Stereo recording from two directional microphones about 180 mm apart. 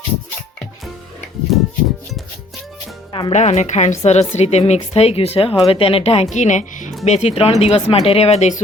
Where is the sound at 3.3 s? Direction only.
40° left (ahead or behind).